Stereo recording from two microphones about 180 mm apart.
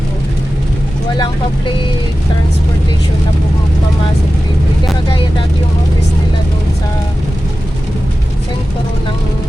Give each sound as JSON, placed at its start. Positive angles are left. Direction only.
{"t": 1.1, "sound": "speech", "side_deg": 25}